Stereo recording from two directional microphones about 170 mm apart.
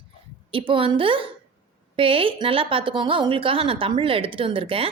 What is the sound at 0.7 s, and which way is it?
A woman's voice, 30° right (ahead or behind).